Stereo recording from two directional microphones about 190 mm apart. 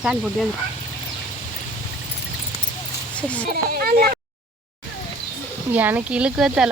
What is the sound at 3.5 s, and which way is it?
Speech, 50° right (ahead or behind).